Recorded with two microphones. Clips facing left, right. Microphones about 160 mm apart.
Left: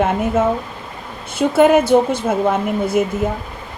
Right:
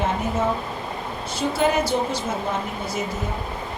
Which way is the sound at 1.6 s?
55° left (ahead or behind).